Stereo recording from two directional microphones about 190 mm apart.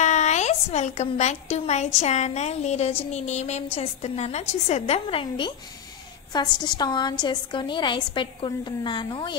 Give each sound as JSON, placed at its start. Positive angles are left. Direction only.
{"t": 0.0, "sound": "a woman's voice", "side_deg": 40}